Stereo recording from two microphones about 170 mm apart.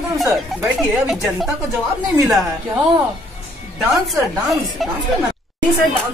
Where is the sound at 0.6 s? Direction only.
Centre (ahead or behind).